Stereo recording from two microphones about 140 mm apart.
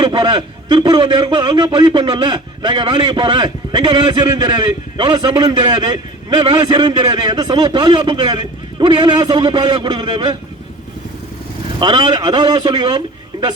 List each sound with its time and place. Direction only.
0.0 s a man's voice: 30° right (ahead or behind)
11.8 s a man's voice: 30° right (ahead or behind)